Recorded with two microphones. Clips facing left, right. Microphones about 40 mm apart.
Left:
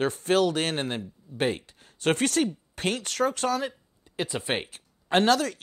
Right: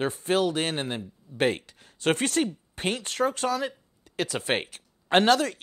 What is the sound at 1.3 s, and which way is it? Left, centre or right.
Speech, right.